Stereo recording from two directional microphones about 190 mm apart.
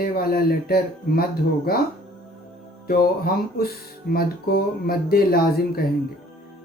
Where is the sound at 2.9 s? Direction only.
50° left (ahead or behind).